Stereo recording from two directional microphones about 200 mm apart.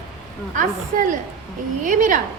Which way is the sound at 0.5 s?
40° right (ahead or behind).